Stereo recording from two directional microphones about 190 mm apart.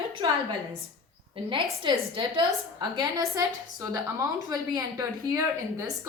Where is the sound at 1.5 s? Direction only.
25° right (ahead or behind).